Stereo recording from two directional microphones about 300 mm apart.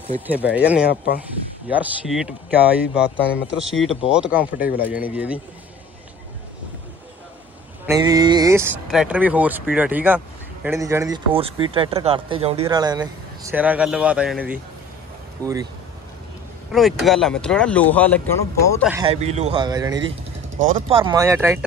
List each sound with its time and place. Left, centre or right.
0.3 s speech: centre
1.7 s speech: centre
7.8 s speech: centre
16.7 s speech: centre
18.9 s speech: centre
19.1 s speech: right
20.5 s speech: right
21.0 s speech: centre